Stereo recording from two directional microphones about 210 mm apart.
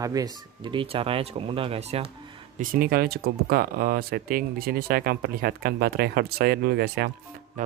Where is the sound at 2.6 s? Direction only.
40° right (ahead or behind).